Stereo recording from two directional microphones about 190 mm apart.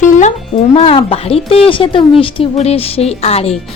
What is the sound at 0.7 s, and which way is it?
A woman's voice, 30° left (ahead or behind).